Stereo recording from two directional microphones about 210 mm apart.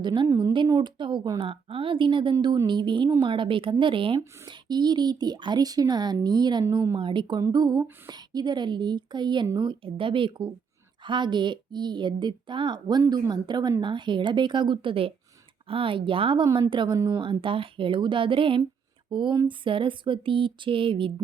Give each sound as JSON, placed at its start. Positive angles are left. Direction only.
{"t": 0.0, "sound": "speech", "side_deg": -20}